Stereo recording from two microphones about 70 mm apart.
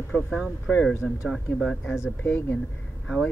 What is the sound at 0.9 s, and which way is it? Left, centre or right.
Speech, left.